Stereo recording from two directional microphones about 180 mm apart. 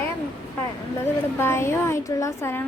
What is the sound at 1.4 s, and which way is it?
A woman's voice, 15° left (ahead or behind).